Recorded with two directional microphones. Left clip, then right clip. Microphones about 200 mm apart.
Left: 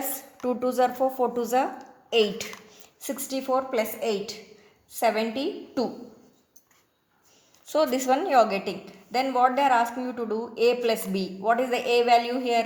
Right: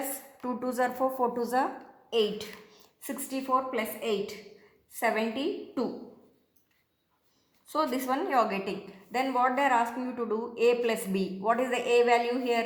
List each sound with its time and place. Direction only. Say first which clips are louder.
0.4 s speech: left 6 dB; 20° left (ahead or behind)
2.0 s a woman's voice: left 5 dB; 40° left (ahead or behind)
3.0 s a woman's voice: left 5 dB; 30° left (ahead or behind)
4.9 s speech: left 4 dB; 25° left (ahead or behind)
7.7 s a woman's voice: left 6 dB; 40° left (ahead or behind); by 12.6 s 25° left (ahead or behind)